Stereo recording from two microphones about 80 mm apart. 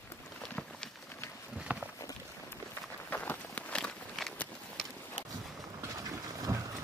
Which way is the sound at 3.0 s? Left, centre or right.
Left.